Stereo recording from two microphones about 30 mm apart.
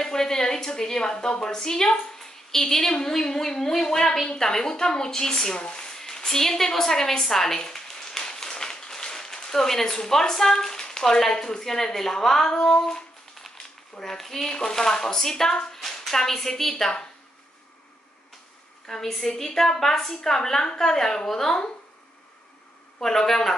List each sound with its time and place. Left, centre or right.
0.0 s a woman's voice: centre
8.2 s a sound: centre
11.3 s speech: left
12.5 s a sound: left
13.9 s speech: centre
18.9 s speech: centre
22.9 s speech: centre